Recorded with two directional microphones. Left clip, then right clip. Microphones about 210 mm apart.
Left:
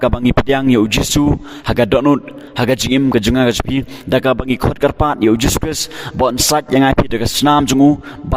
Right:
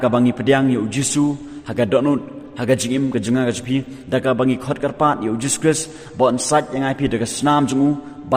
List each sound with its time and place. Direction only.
0.0 s a man's voice: 55° left (ahead or behind)